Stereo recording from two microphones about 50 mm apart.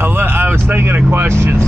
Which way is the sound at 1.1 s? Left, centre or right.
Right.